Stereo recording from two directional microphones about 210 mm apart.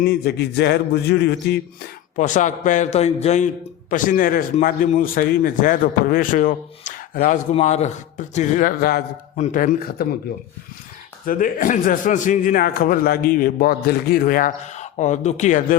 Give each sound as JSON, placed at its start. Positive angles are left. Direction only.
{"t": 0.0, "sound": "speech", "side_deg": 50}
{"t": 2.1, "sound": "a man's voice", "side_deg": 35}
{"t": 11.3, "sound": "a man's voice", "side_deg": 40}